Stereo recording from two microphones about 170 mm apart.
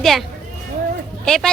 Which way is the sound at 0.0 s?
Centre (ahead or behind).